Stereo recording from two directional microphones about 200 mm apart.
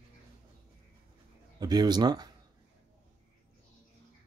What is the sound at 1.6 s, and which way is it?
Speech, 20° right (ahead or behind).